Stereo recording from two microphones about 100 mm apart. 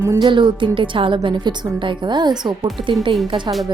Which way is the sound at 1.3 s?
50° right (ahead or behind).